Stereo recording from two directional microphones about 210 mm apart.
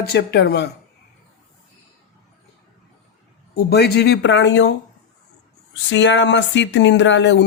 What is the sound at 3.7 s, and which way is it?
Speech, 50° left (ahead or behind).